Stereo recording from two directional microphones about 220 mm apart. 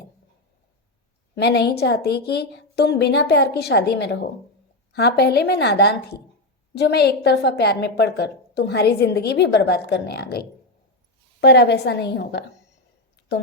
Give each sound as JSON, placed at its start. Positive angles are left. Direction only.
{"t": 1.4, "sound": "a woman's voice", "side_deg": 50}